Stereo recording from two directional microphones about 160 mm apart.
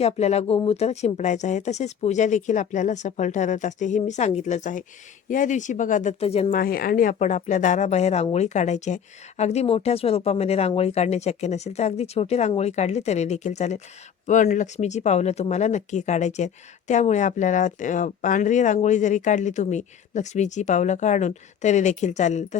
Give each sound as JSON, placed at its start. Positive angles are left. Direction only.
{"t": 0.0, "sound": "speech", "side_deg": 45}
{"t": 6.5, "sound": "speech", "side_deg": 65}